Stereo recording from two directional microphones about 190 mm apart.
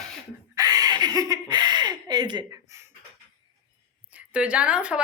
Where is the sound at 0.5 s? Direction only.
20° right (ahead or behind).